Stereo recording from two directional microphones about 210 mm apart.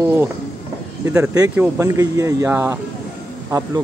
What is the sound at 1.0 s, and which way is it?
Speech, 15° right (ahead or behind).